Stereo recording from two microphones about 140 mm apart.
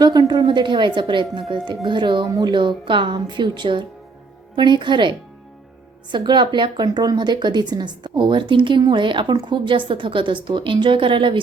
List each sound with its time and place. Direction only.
0.0 s a woman's voice: 30° right (ahead or behind)